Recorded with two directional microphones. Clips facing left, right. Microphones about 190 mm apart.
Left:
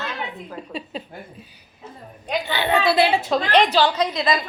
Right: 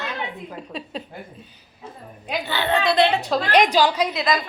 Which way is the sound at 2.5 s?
15° left (ahead or behind).